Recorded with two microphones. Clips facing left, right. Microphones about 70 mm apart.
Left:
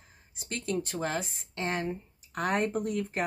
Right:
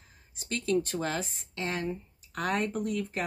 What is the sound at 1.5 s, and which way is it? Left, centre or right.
Speech, left.